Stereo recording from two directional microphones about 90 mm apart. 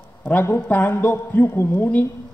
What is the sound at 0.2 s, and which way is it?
A man's voice, 20° left (ahead or behind).